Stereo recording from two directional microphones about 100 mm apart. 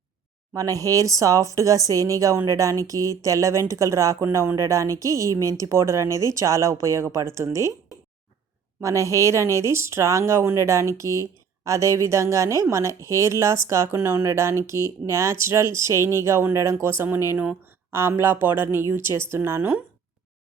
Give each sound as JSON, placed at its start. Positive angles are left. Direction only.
{"t": 0.5, "sound": "a woman's voice", "side_deg": -35}
{"t": 8.8, "sound": "a woman's voice", "side_deg": -30}
{"t": 17.3, "sound": "speech", "side_deg": -15}
{"t": 17.9, "sound": "speech", "side_deg": -25}